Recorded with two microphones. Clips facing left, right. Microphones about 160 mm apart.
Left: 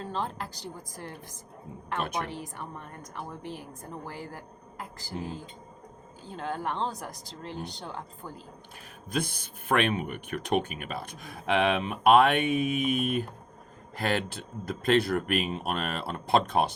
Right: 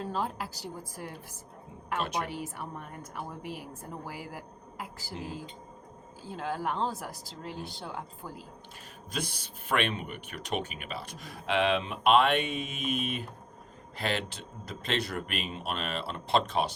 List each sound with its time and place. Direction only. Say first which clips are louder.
0.0 s a woman's voice: even; 5° right (ahead or behind)
6.2 s speech: even; 5° right (ahead or behind)
9.0 s speech: left 5 dB; 50° left (ahead or behind)